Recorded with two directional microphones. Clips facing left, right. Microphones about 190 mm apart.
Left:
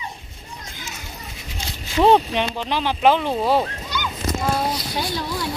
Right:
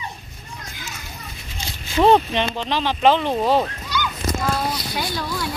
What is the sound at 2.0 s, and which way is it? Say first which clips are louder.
Speech: even; 10° left (ahead or behind).